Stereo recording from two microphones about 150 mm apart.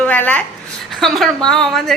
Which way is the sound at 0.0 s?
10° left (ahead or behind).